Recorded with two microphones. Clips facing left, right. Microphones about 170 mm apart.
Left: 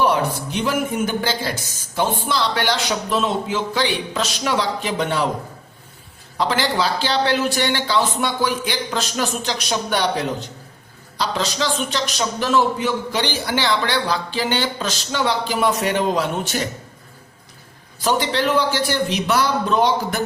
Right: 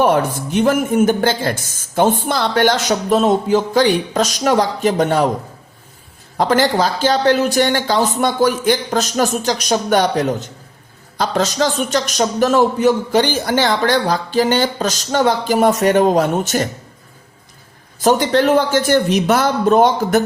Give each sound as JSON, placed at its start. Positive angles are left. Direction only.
{"t": 0.0, "sound": "a man's voice", "side_deg": -50}
{"t": 6.3, "sound": "a man's voice", "side_deg": -45}
{"t": 18.0, "sound": "a man's voice", "side_deg": -45}